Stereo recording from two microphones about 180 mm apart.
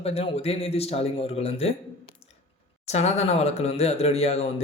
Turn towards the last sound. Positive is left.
turn(degrees=35)  # may be behind; listen again after turning